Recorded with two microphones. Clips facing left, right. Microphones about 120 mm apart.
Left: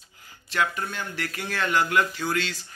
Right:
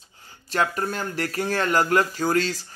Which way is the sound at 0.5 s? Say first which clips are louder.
Right 3 dB; 40° right (ahead or behind).